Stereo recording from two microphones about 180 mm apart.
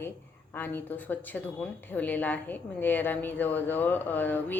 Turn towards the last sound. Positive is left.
turn(degrees=10)  # may be behind; listen again after turning